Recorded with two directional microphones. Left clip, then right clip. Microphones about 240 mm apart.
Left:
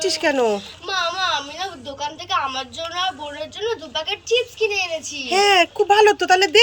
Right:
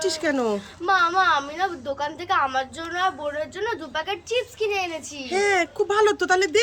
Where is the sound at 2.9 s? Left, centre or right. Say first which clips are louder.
Right 1 dB; centre.